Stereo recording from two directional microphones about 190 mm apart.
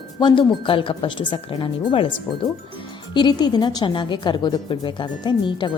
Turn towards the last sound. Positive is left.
turn(degrees=25)  # may be behind; listen again after turning